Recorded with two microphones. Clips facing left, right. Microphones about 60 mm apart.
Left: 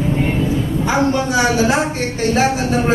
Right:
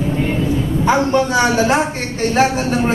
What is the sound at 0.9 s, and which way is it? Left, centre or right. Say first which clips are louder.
Speech: right 2 dB; right.